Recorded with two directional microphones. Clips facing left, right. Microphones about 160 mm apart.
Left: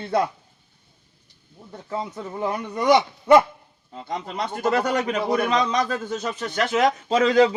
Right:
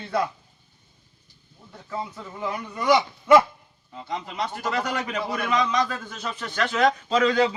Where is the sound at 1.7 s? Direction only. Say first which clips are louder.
Left 3 dB; 35° left (ahead or behind).